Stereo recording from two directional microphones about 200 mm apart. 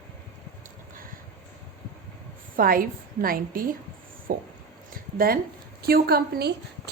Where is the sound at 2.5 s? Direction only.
45° right (ahead or behind).